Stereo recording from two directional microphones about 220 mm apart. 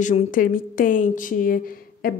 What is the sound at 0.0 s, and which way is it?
A woman's voice, 30° left (ahead or behind).